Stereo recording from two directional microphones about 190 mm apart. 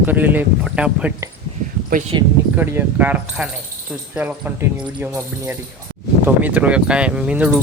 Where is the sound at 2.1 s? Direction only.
25° right (ahead or behind).